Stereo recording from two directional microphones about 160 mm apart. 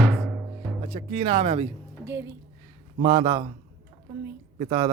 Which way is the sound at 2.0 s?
15° right (ahead or behind).